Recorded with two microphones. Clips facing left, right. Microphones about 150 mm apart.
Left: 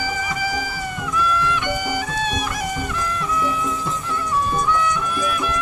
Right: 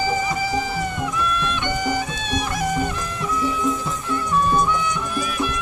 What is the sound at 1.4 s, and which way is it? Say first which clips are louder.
Music: left 1 dB; 25° right (ahead or behind).